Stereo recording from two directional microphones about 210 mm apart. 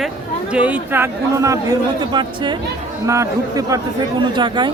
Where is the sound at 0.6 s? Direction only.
10° right (ahead or behind).